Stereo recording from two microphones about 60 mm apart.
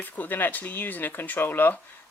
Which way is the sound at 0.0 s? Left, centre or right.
Left.